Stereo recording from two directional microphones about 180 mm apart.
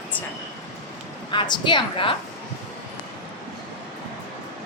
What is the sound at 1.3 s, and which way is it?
Speech, 25° left (ahead or behind).